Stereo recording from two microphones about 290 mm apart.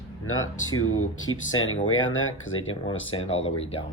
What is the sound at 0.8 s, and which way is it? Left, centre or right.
Speech, left.